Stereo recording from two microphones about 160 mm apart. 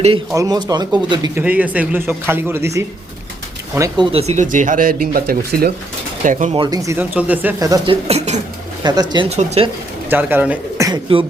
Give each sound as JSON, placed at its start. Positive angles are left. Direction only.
{"t": 0.3, "sound": "speech", "side_deg": -25}
{"t": 1.4, "sound": "a man's voice", "side_deg": -10}
{"t": 4.1, "sound": "speech", "side_deg": -40}
{"t": 6.5, "sound": "speech", "side_deg": -25}
{"t": 7.0, "sound": "a man's voice", "side_deg": -10}
{"t": 7.9, "sound": "speech", "side_deg": -40}
{"t": 8.8, "sound": "speech", "side_deg": -25}
{"t": 9.3, "sound": "speech", "side_deg": -40}
{"t": 10.1, "sound": "speech", "side_deg": -10}
{"t": 10.8, "sound": "speech", "side_deg": -30}